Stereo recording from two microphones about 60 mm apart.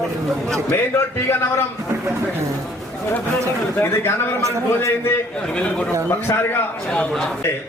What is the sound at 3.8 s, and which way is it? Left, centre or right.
Speech, left.